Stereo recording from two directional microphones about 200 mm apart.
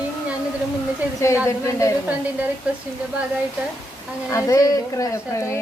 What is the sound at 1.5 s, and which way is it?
Speech, 15° left (ahead or behind).